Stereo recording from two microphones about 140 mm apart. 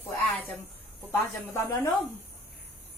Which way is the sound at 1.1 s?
20° left (ahead or behind).